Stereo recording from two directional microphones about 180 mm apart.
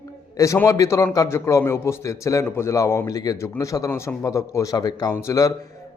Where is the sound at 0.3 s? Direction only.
15° left (ahead or behind).